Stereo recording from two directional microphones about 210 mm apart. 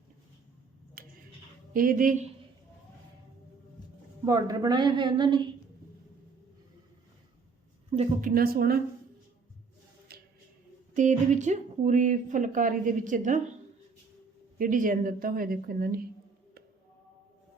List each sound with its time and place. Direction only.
1.0 s finger snapping: 45° right (ahead or behind)
1.7 s speech: 40° right (ahead or behind)
4.3 s a woman's voice: 15° right (ahead or behind)
7.9 s a woman's voice: 30° right (ahead or behind)
8.3 s a woman's voice: 45° right (ahead or behind)
10.1 s music: 45° right (ahead or behind)
10.9 s speech: 35° right (ahead or behind)
14.6 s a woman's voice: 40° right (ahead or behind)